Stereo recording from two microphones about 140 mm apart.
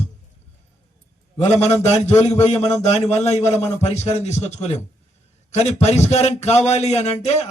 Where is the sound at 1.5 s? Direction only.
50° left (ahead or behind).